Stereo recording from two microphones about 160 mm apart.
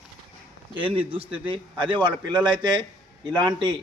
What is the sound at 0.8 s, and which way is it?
A man's voice, 30° right (ahead or behind).